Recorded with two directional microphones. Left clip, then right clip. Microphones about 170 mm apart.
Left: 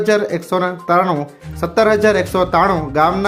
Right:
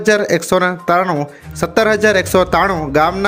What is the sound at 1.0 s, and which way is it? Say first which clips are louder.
Speech: right 1 dB; 10° right (ahead or behind).